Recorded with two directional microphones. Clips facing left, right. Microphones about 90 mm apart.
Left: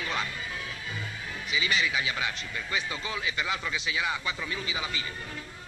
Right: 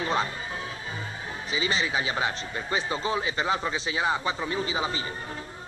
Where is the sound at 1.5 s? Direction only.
35° right (ahead or behind).